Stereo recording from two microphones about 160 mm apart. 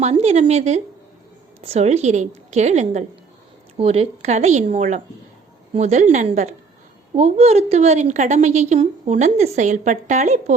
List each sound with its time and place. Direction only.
0.0 s a woman's voice: 45° right (ahead or behind)